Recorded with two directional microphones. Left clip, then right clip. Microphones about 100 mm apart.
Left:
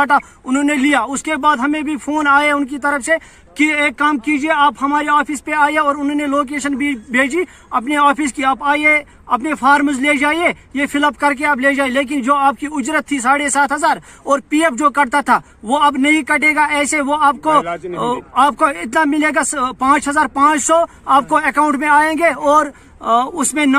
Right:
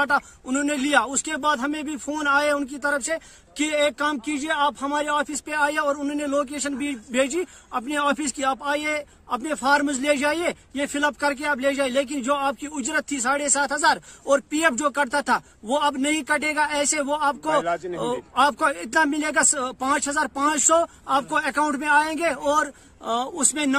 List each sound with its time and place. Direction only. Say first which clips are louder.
0.5 s a man's voice: left 8 dB; 25° right (ahead or behind)
6.4 s a man's voice: left 9 dB; 35° right (ahead or behind)
11.0 s a man's voice: left 8 dB; 15° right (ahead or behind)
23.0 s speech: left 11 dB; 45° right (ahead or behind)
23.3 s a man's voice: left 8 dB; 25° right (ahead or behind)